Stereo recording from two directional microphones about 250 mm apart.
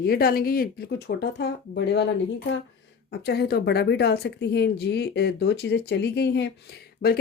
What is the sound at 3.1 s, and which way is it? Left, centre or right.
A woman's voice, left.